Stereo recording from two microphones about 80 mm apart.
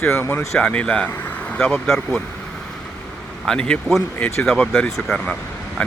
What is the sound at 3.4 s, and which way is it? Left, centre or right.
Speech, centre.